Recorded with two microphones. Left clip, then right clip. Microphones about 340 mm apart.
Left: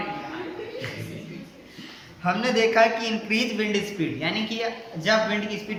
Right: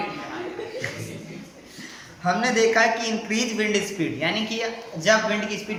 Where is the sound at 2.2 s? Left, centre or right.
Centre.